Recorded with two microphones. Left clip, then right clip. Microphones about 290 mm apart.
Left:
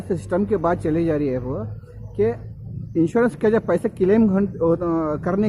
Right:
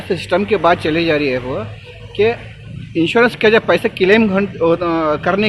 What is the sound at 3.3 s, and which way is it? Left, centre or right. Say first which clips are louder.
Speech: right 7 dB; centre.